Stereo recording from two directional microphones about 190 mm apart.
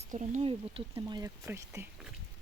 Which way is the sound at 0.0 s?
40° right (ahead or behind).